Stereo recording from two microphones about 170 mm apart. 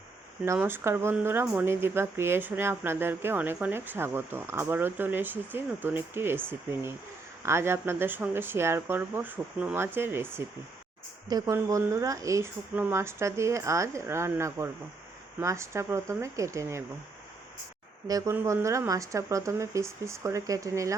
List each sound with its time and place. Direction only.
0.4 s speech: 15° right (ahead or behind)
18.1 s speech: 15° right (ahead or behind)